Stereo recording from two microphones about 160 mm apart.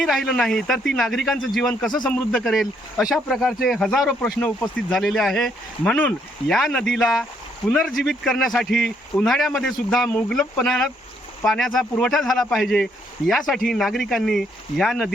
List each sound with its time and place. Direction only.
0.0 s speech: centre (ahead or behind)